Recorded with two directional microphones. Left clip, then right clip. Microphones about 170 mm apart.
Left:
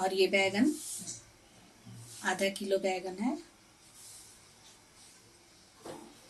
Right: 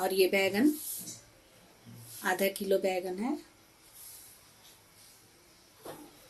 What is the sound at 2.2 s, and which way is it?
Speech, 30° right (ahead or behind).